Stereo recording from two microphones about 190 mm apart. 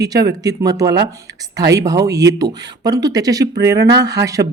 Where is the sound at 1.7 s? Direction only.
15° right (ahead or behind).